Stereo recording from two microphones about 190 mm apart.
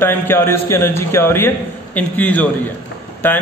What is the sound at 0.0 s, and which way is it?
A man's voice, 10° left (ahead or behind).